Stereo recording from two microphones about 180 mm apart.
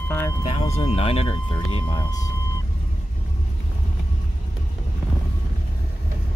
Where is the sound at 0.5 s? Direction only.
35° left (ahead or behind).